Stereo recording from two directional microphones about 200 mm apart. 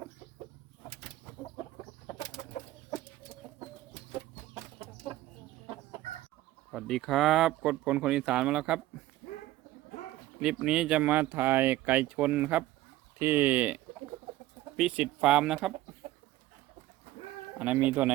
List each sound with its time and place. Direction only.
2.4 s chicken: 25° left (ahead or behind)
6.7 s speech: centre (ahead or behind)
10.4 s speech: 5° right (ahead or behind)
17.6 s speech: 10° right (ahead or behind)